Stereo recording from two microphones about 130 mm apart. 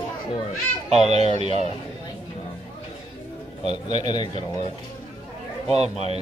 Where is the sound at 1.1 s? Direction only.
55° right (ahead or behind).